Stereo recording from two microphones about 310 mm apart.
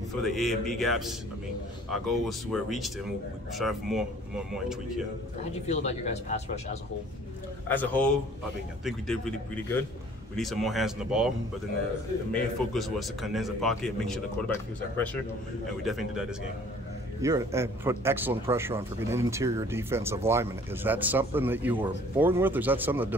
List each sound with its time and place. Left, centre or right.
0.1 s speech: centre
5.7 s speech: left
7.6 s speech: centre